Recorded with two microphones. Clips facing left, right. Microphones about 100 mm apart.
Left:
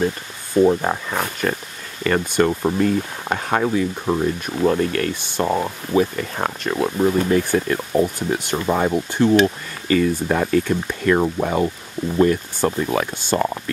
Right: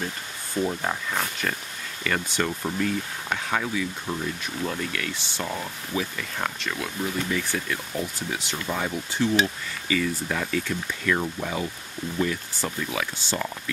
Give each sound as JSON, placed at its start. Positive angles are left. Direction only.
{"t": 0.7, "sound": "speech", "side_deg": 55}
{"t": 4.0, "sound": "speech", "side_deg": 75}
{"t": 4.6, "sound": "speech", "side_deg": 45}
{"t": 6.1, "sound": "speech", "side_deg": 45}
{"t": 11.1, "sound": "speech", "side_deg": 80}
{"t": 12.2, "sound": "speech", "side_deg": 50}